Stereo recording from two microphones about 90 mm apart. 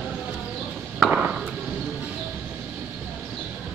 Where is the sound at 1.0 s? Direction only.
15° right (ahead or behind).